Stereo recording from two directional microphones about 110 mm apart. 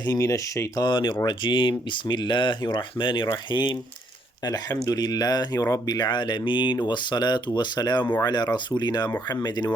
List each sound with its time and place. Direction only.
0.0 s speech: 35° left (ahead or behind)
0.9 s speech: 45° left (ahead or behind)
4.4 s speech: 35° left (ahead or behind)